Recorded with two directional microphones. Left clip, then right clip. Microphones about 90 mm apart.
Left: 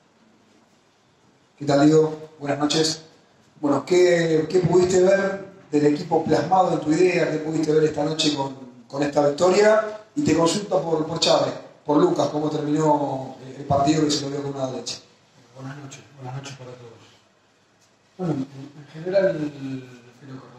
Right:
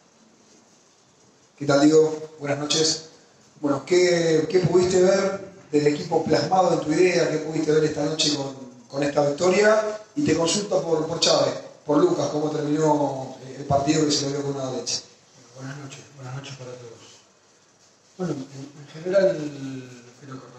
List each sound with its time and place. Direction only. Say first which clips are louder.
1.6 s a man's voice: even; 35° left (ahead or behind)
18.1 s a man's voice: left 2 dB; 35° left (ahead or behind)